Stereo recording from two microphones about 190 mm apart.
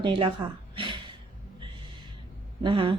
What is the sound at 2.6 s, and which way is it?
Speech, 30° right (ahead or behind).